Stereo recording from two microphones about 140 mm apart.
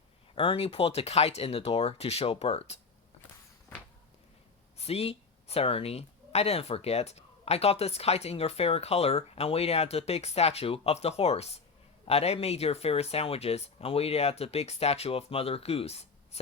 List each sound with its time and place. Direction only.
0.3 s speech: 45° left (ahead or behind)
4.8 s speech: 45° left (ahead or behind)